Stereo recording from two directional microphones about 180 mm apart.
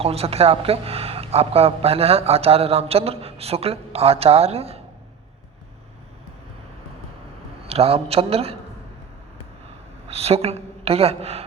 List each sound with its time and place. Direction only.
0.0 s speech: 35° right (ahead or behind)
7.7 s speech: 35° right (ahead or behind)
10.1 s a woman's voice: 35° right (ahead or behind)